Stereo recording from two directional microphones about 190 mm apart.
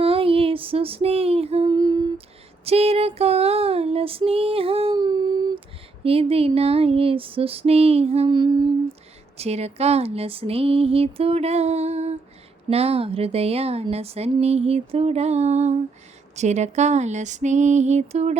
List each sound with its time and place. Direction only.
0.0 s female singing: 30° right (ahead or behind)